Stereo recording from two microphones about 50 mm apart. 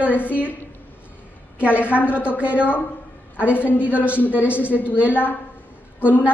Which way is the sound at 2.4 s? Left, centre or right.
Right.